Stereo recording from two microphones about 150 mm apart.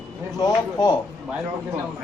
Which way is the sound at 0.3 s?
25° left (ahead or behind).